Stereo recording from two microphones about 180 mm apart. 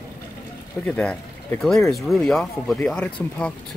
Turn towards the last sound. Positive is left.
turn(degrees=5)  # may be behind; listen again after turning